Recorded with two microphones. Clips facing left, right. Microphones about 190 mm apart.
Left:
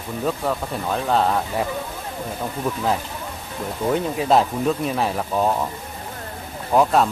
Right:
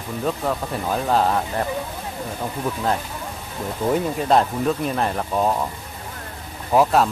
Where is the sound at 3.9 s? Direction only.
Centre (ahead or behind).